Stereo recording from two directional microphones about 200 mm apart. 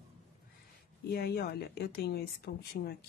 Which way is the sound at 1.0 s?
50° left (ahead or behind).